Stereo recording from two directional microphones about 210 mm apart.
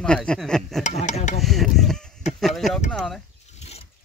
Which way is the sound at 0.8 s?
30° left (ahead or behind).